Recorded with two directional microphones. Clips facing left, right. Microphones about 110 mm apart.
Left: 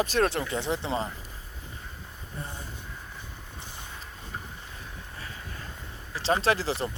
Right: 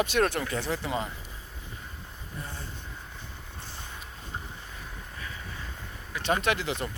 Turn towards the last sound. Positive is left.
turn(degrees=35)  # may be behind; listen again after turning